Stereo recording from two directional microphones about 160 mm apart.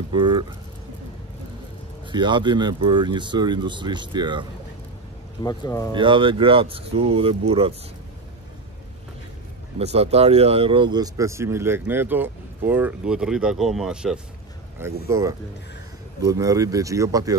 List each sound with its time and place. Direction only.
0.1 s speech: 30° right (ahead or behind)
2.0 s speech: 30° right (ahead or behind)
5.4 s speech: 20° left (ahead or behind)
5.9 s speech: 30° right (ahead or behind)
9.8 s speech: 40° right (ahead or behind); by 14.2 s 5° right (ahead or behind)
15.0 s speech: 20° right (ahead or behind)